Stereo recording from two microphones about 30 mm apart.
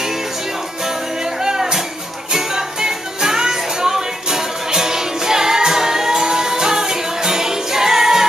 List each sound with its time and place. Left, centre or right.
1.4 s music: centre